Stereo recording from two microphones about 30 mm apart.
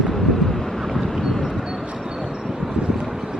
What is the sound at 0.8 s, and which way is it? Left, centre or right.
Vehicle, centre.